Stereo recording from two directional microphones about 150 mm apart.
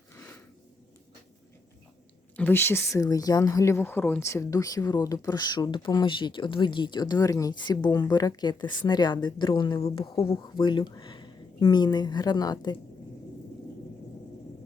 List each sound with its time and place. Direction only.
2.3 s speech: 15° left (ahead or behind)